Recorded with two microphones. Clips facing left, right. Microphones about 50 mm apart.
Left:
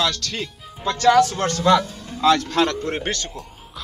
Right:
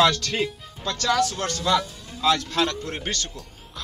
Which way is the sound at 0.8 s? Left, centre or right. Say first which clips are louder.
Left 7 dB; centre.